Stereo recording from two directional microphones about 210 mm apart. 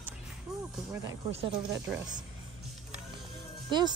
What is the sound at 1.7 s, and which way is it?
Speech, 20° right (ahead or behind).